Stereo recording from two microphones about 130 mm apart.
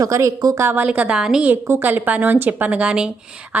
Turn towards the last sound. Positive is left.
turn(degrees=-5)  # may be behind; listen again after turning